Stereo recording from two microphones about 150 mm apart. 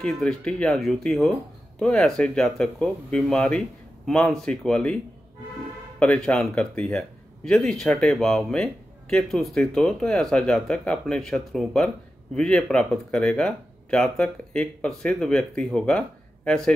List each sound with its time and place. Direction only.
0.0 s speech: 5° left (ahead or behind)
5.9 s speech: 5° left (ahead or behind)